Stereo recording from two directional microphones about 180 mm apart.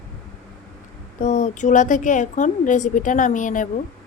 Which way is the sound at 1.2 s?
40° left (ahead or behind).